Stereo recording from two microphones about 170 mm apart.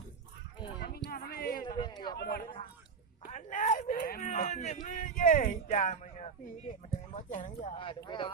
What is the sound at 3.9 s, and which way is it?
Speech, 60° left (ahead or behind).